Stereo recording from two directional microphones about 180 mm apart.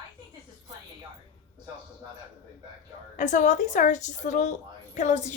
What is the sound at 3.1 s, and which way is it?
A woman's voice, 45° left (ahead or behind).